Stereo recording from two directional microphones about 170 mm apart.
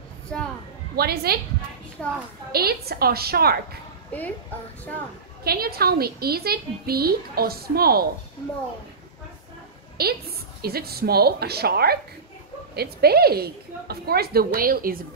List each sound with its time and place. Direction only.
0.3 s a child's voice: 5° left (ahead or behind)
0.9 s a woman's voice: 65° right (ahead or behind)
2.0 s a child's voice: 5° left (ahead or behind)
2.5 s a woman's voice: 65° right (ahead or behind)
4.1 s speech: 10° left (ahead or behind)
5.4 s a woman's voice: 65° right (ahead or behind)
9.9 s a woman's voice: 65° right (ahead or behind)